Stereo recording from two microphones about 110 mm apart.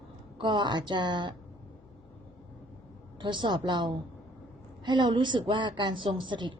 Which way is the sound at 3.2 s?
45° right (ahead or behind).